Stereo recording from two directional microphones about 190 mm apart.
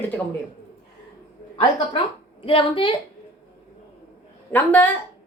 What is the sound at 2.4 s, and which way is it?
Speech, 25° left (ahead or behind).